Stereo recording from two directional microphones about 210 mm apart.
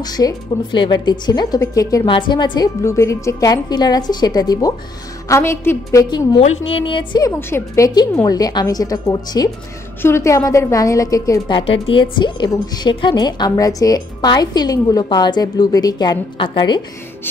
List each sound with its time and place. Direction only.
0.0 s a woman's voice: 20° left (ahead or behind)